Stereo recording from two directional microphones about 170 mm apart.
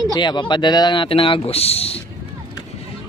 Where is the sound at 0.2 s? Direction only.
25° left (ahead or behind).